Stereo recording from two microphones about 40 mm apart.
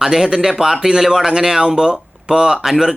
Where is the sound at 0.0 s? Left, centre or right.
Centre.